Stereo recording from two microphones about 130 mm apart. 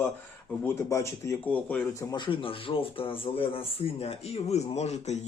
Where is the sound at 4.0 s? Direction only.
55° left (ahead or behind).